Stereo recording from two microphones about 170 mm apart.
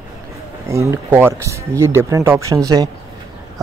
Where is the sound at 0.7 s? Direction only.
15° right (ahead or behind).